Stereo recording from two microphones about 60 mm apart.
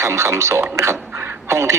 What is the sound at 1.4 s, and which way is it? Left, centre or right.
Speech, right.